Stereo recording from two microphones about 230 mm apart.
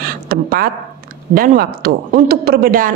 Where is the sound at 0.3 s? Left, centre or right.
Right.